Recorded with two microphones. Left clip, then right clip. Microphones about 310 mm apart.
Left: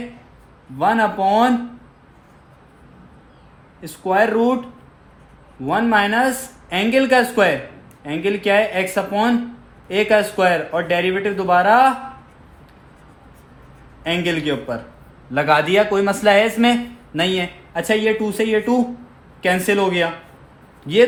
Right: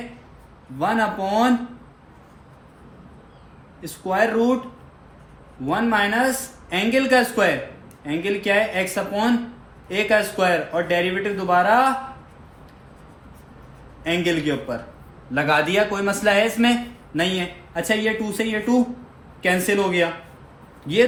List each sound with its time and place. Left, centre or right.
0.8 s speech: left
3.8 s speech: left
5.6 s speech: left
14.0 s speech: left